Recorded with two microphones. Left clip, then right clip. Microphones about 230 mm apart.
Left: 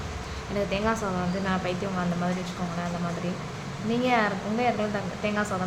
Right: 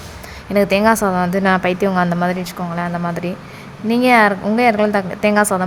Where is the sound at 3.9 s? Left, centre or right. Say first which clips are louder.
Right 12 dB; right.